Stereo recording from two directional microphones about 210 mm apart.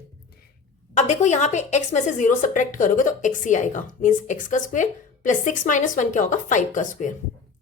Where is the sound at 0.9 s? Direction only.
35° left (ahead or behind).